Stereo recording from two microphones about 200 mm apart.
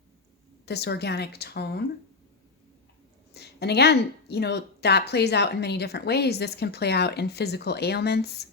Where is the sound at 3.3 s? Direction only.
55° left (ahead or behind).